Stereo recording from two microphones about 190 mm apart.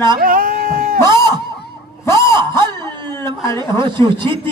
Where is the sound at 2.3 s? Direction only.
25° right (ahead or behind).